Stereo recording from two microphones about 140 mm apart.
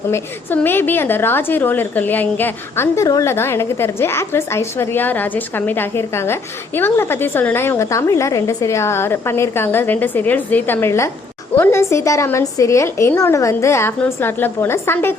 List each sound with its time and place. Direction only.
0.1 s a woman's voice: 15° left (ahead or behind)